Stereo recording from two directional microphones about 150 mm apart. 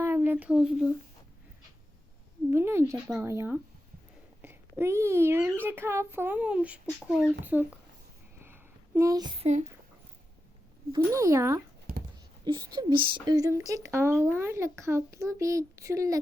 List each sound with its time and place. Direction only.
0.0 s speech: 15° right (ahead or behind)
2.5 s a sound: 15° right (ahead or behind)
3.2 s a child's voice: 15° right (ahead or behind)
8.4 s a sound: 15° right (ahead or behind)
9.4 s a child's voice: 50° right (ahead or behind)
10.9 s speech: 20° right (ahead or behind)
12.5 s speech: 30° right (ahead or behind)